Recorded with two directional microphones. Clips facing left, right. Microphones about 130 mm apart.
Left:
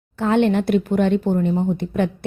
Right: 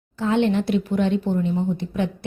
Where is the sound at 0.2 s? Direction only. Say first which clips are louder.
Left 3 dB; 55° left (ahead or behind).